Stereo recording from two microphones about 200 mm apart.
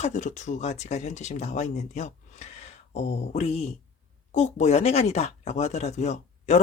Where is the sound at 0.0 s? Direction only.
35° left (ahead or behind).